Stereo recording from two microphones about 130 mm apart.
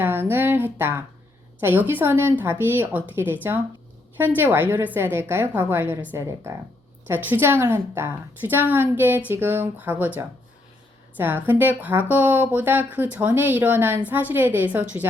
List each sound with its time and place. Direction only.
0.0 s a sound: 15° right (ahead or behind)
1.9 s speech: 15° right (ahead or behind)
11.2 s speech: 15° right (ahead or behind)